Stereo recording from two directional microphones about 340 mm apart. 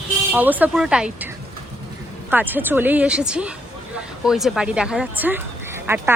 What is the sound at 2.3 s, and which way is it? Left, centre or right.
Speech, centre.